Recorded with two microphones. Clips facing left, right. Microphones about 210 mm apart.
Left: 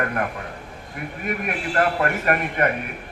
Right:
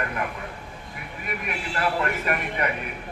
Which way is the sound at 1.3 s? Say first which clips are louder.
Left 5 dB; 50° left (ahead or behind).